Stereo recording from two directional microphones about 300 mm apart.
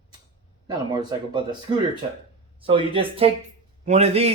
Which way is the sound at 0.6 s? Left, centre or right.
Centre.